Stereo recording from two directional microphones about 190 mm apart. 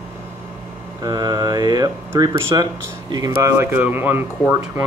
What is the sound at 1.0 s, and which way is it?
Speech, 20° right (ahead or behind).